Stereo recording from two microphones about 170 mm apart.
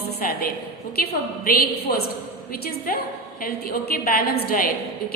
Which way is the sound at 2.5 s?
60° left (ahead or behind).